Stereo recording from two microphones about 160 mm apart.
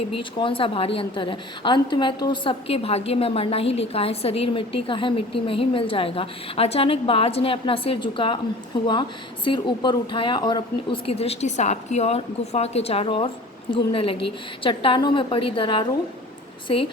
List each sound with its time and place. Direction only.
0.2 s a woman's voice: 30° left (ahead or behind)
11.1 s a woman's voice: 40° left (ahead or behind)